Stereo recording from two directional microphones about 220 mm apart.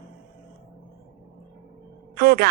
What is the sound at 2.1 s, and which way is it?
Speech, 45° right (ahead or behind).